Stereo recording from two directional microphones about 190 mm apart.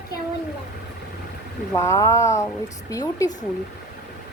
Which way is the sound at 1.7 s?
15° left (ahead or behind).